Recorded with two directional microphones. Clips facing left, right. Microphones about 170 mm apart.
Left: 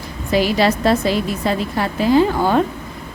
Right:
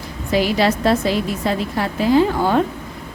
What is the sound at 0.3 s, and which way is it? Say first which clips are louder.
A woman's voice: left 1 dB; 35° left (ahead or behind).